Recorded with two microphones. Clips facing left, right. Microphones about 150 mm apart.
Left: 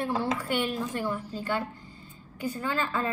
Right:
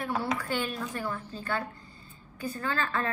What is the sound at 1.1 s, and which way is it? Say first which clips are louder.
A woman's voice: left 3 dB; 10° left (ahead or behind).